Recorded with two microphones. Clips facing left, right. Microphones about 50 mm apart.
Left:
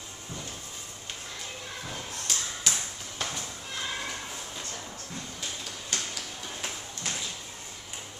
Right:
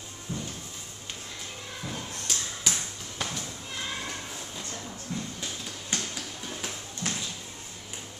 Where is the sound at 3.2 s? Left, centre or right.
Centre.